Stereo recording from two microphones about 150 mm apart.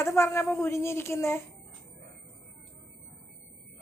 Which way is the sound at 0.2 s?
15° left (ahead or behind).